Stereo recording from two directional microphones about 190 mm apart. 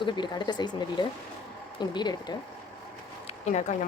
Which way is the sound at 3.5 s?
40° left (ahead or behind).